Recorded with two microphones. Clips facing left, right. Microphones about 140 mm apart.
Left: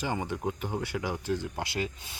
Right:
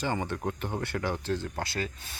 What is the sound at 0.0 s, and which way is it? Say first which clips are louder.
Speech: right 1 dB; 10° left (ahead or behind).